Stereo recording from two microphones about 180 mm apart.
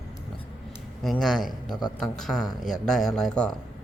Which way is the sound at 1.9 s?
Centre (ahead or behind).